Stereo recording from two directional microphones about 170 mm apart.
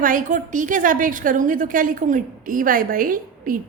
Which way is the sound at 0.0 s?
55° right (ahead or behind).